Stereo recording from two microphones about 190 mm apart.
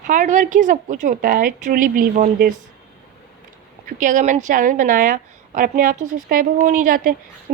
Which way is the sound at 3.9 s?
40° right (ahead or behind).